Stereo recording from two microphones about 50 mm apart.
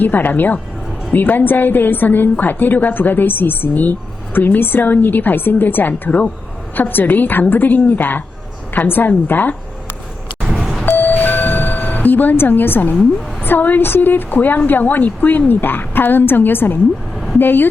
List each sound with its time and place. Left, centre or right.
0.0 s a woman's voice: left
6.7 s a woman's voice: left
10.4 s beep: centre
10.8 s doorbell: left
13.4 s a woman's voice: left